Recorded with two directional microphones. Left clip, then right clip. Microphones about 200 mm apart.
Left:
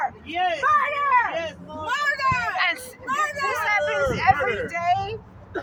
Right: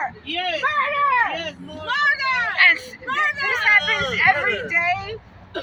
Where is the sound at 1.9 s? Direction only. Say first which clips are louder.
Right 3 dB; 40° left (ahead or behind).